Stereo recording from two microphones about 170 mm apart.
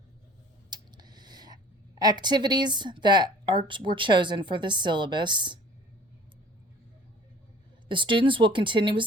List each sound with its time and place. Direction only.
0.7 s a sound: 25° right (ahead or behind)
2.0 s a woman's voice: 25° right (ahead or behind)
7.9 s a woman's voice: 30° right (ahead or behind)